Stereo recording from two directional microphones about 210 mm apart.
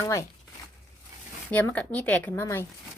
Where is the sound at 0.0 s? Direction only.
15° left (ahead or behind).